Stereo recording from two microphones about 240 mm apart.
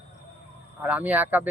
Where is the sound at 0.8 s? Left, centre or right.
Centre.